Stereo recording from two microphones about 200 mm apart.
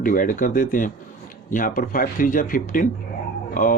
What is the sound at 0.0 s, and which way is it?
Speech, 40° left (ahead or behind).